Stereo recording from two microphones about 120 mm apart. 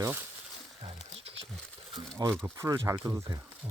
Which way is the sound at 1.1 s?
55° right (ahead or behind).